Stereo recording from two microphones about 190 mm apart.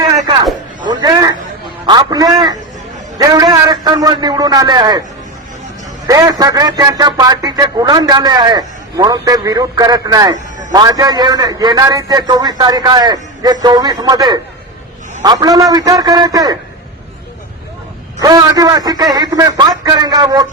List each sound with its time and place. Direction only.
0.9 s a sound: 20° right (ahead or behind)
1.9 s a man's voice: 20° right (ahead or behind)
6.1 s a man's voice: 20° right (ahead or behind)
18.2 s a man's voice: 20° right (ahead or behind)